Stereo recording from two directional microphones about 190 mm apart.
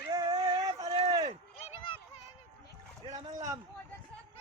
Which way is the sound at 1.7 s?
25° left (ahead or behind).